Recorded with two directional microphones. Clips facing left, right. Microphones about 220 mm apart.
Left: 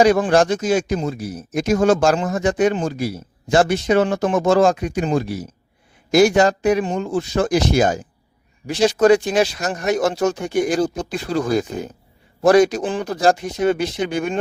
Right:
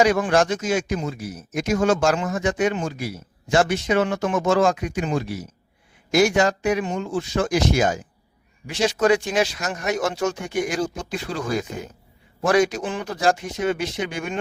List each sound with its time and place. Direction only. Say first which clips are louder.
0.0 s speech: left 4 dB; 35° left (ahead or behind)